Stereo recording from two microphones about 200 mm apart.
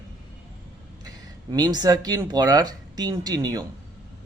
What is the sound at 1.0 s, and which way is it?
Speech, 20° right (ahead or behind).